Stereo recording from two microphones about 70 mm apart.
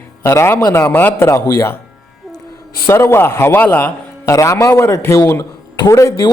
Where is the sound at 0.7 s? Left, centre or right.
Left.